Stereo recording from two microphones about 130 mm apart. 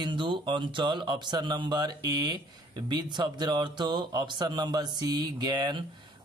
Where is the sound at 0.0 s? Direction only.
35° right (ahead or behind).